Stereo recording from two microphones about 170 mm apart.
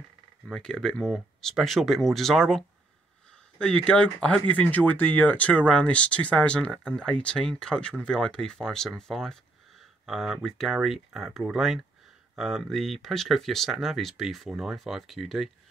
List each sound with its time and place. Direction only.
0.5 s speech: 5° left (ahead or behind)